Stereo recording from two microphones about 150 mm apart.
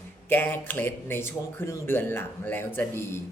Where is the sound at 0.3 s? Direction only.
15° left (ahead or behind).